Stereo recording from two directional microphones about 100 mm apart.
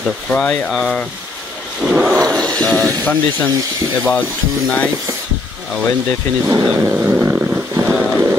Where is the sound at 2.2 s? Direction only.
10° left (ahead or behind).